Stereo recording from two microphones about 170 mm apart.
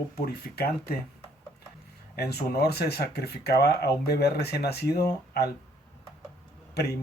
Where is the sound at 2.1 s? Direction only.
70° left (ahead or behind).